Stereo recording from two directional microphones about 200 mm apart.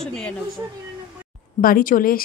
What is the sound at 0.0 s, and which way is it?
Speech, 5° left (ahead or behind).